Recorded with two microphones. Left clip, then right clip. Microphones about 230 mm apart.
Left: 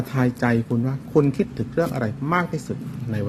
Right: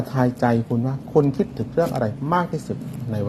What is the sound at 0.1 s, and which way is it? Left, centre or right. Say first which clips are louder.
Speech: right 2 dB; centre.